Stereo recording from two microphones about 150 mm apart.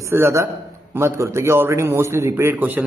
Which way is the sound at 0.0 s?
20° right (ahead or behind).